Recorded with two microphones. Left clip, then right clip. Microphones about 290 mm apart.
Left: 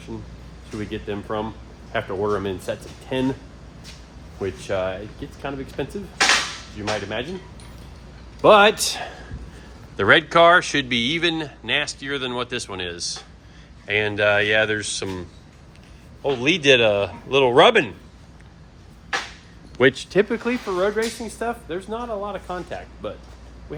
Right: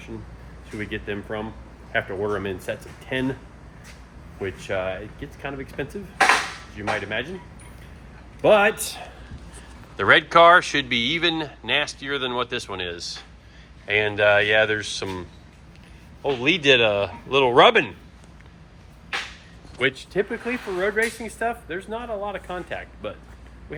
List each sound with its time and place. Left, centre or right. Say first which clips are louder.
0.8 s speech: even; centre
4.4 s speech: left 2 dB; centre
8.4 s speech: left 4 dB; centre
8.9 s a man's voice: left 7 dB; left
10.0 s speech: even; centre
19.8 s speech: left 6 dB; left
20.7 s speech: right 1 dB; centre